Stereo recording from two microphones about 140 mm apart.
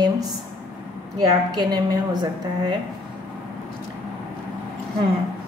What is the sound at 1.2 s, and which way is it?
A woman's voice, 30° right (ahead or behind).